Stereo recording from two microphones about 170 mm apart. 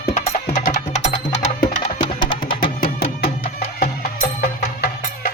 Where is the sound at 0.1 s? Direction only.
45° left (ahead or behind).